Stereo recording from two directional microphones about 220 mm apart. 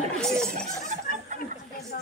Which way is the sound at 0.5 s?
35° right (ahead or behind).